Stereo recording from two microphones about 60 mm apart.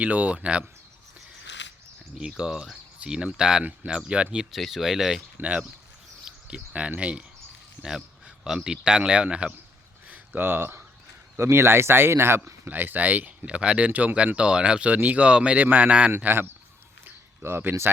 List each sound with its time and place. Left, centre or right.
0.0 s speech: right
2.1 s speech: centre
3.6 s speech: right
4.5 s speech: centre
5.4 s speech: right
6.2 s insect: centre
7.0 s speech: centre
10.1 s a sound: right
11.3 s speech: right
12.6 s speech: right
16.1 s speech: right